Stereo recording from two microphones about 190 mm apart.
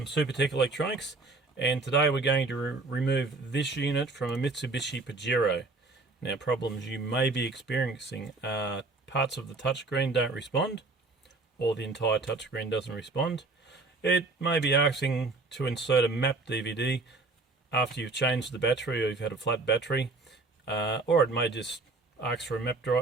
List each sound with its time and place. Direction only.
0.0 s speech: 65° left (ahead or behind)